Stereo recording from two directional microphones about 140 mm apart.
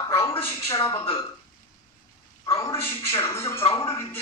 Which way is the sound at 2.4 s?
20° left (ahead or behind).